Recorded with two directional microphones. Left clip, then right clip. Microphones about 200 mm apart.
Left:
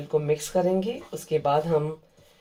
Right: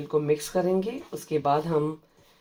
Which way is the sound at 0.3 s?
20° right (ahead or behind).